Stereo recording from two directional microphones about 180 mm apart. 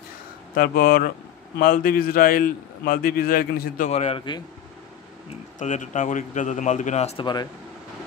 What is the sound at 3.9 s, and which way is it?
Speech, 35° left (ahead or behind).